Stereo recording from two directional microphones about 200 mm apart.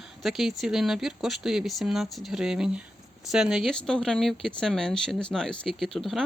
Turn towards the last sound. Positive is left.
turn(degrees=0)  # may be behind; listen again after turning